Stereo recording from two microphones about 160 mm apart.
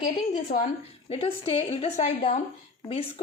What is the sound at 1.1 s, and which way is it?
A woman's voice, 35° left (ahead or behind).